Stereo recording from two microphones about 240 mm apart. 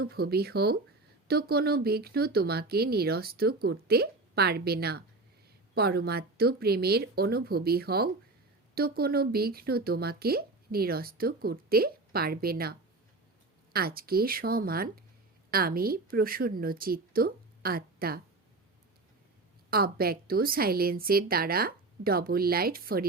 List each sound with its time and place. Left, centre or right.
0.0 s speech: right
13.7 s a woman's voice: right
19.7 s speech: right